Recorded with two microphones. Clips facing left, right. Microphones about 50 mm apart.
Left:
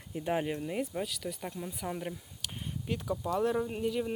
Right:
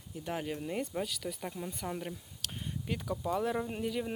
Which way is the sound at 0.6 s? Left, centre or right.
Centre.